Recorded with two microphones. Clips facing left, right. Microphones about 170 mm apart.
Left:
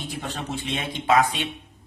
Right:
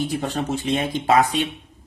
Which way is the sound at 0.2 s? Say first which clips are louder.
Right 6 dB; 40° right (ahead or behind).